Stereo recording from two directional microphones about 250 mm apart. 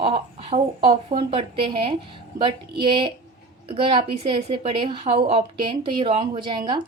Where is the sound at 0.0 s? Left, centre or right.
Right.